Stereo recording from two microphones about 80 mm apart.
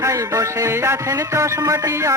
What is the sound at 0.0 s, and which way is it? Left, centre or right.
Music, right.